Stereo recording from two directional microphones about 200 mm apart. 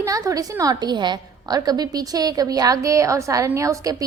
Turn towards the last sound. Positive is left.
turn(degrees=-15)  # may be behind; listen again after turning